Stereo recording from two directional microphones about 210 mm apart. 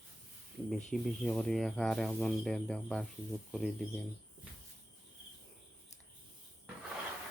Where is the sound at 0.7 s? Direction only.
Centre (ahead or behind).